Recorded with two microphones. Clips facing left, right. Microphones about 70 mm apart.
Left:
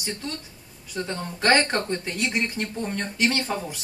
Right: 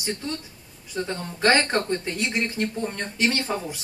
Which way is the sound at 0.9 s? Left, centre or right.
Right.